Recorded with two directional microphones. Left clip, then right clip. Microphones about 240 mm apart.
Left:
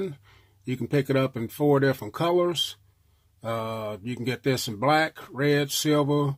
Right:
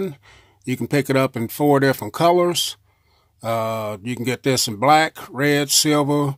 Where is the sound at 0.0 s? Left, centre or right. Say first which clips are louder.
Right 5 dB; right.